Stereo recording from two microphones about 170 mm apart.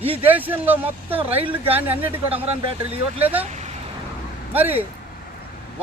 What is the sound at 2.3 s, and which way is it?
Speech, 35° right (ahead or behind).